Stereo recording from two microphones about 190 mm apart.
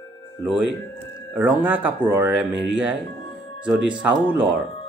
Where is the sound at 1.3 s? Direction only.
10° right (ahead or behind).